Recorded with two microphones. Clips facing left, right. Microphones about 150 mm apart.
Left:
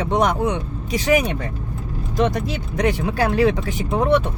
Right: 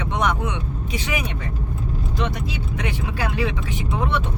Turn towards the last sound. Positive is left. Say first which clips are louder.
# left 6 dB
turn(degrees=45)  # may be behind; listen again after turning